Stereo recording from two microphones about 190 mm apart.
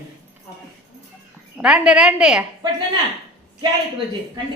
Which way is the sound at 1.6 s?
5° right (ahead or behind).